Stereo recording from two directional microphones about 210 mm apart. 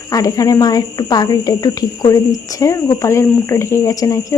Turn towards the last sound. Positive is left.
turn(degrees=15)  # may be behind; listen again after turning